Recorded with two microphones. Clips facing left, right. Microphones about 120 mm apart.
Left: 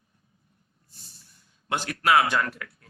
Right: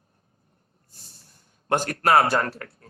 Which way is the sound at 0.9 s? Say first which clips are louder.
Right 1 dB; 50° right (ahead or behind).